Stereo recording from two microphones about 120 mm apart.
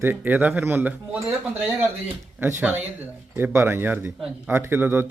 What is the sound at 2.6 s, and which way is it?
Speech, 15° right (ahead or behind).